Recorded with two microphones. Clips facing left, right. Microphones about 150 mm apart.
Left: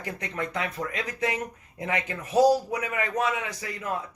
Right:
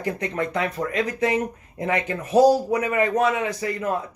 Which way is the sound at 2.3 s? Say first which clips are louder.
Right 4 dB; 50° right (ahead or behind).